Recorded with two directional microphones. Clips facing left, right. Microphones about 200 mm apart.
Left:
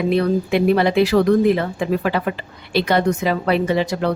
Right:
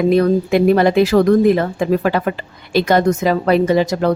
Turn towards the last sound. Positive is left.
turn(degrees=-40)  # may be behind; listen again after turning